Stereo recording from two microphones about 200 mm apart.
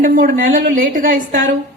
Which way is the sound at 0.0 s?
45° right (ahead or behind).